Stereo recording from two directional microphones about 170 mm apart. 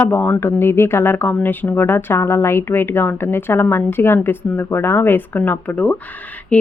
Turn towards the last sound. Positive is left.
turn(degrees=10)  # may be behind; listen again after turning